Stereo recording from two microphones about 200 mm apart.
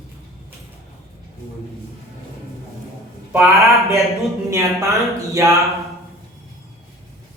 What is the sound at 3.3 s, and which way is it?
Speech, 5° right (ahead or behind).